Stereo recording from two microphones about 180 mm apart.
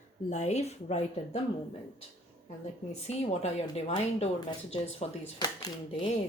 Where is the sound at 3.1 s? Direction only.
35° left (ahead or behind).